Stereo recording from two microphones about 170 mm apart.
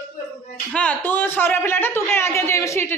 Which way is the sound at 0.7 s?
10° left (ahead or behind).